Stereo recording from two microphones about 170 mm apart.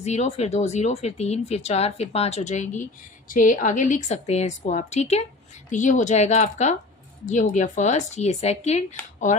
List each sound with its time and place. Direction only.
0.0 s a woman's voice: 40° left (ahead or behind)